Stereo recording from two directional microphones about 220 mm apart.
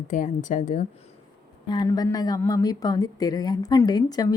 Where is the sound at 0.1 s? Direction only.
35° left (ahead or behind).